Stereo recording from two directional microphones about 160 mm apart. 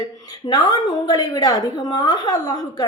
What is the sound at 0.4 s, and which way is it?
A woman's voice, 25° left (ahead or behind).